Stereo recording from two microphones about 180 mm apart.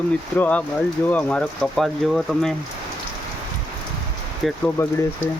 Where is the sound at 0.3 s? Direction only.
10° left (ahead or behind).